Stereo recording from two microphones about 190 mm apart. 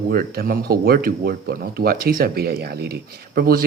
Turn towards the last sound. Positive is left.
turn(degrees=-50)  # may be behind; listen again after turning